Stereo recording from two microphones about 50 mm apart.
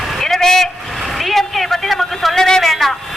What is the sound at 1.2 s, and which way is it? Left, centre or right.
A woman's voice, centre.